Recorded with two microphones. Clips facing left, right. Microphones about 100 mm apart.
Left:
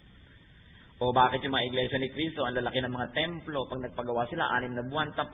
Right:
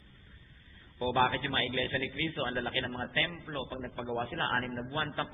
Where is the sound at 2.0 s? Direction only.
15° left (ahead or behind).